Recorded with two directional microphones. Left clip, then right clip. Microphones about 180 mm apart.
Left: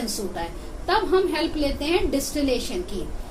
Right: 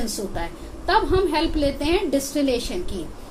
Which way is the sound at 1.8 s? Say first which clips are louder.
Right 2 dB; 45° right (ahead or behind).